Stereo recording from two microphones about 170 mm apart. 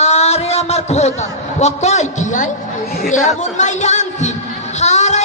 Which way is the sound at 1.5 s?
40° left (ahead or behind).